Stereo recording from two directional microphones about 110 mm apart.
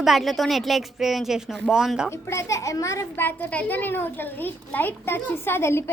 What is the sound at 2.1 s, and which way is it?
A child's voice, 25° left (ahead or behind).